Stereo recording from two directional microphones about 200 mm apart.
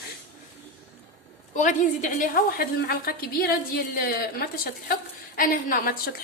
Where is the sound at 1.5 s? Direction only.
40° left (ahead or behind).